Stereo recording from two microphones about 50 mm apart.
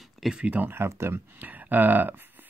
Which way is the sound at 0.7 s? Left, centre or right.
Right.